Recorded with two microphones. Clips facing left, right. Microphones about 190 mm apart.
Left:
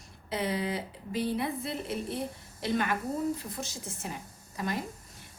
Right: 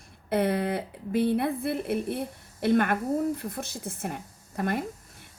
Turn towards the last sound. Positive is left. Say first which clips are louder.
# right 5 dB
turn(degrees=-55)  # may be behind; listen again after turning